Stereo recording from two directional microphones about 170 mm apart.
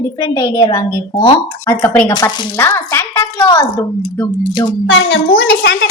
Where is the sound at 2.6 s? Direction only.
15° left (ahead or behind).